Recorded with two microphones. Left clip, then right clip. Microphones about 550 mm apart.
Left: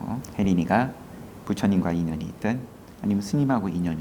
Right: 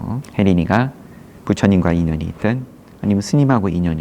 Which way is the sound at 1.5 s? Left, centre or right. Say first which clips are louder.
Right 9 dB; right.